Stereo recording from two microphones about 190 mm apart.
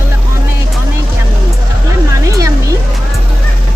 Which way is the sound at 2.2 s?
15° right (ahead or behind).